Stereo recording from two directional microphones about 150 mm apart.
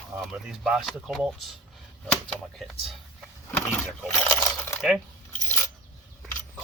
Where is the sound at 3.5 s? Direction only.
15° left (ahead or behind).